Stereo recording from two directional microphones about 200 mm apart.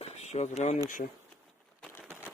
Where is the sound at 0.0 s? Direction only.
35° left (ahead or behind).